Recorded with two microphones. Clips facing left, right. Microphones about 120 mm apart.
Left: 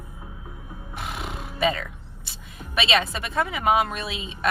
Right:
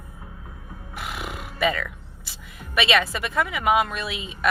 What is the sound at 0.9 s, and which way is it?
Roar, 30° left (ahead or behind).